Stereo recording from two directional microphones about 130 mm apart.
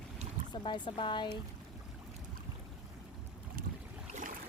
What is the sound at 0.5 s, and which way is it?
Speech, 35° left (ahead or behind).